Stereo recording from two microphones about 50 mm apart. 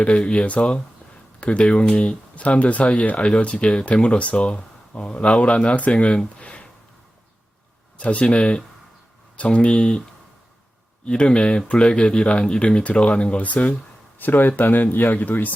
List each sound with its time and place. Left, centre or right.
0.0 s speech: left
7.9 s speech: left
11.0 s speech: centre
14.2 s speech: left